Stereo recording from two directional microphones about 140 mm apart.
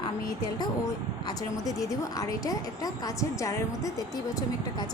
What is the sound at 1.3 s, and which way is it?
A woman's voice, 25° left (ahead or behind).